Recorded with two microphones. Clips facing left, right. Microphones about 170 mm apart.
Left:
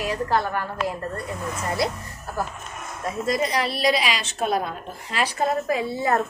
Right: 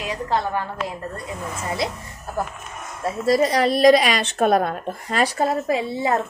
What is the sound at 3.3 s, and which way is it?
A woman's voice, 40° right (ahead or behind).